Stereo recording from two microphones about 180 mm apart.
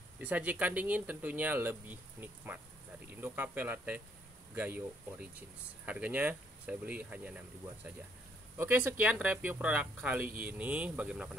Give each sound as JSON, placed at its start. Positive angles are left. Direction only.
{"t": 0.2, "sound": "speech", "side_deg": -10}
{"t": 8.5, "sound": "speech", "side_deg": -10}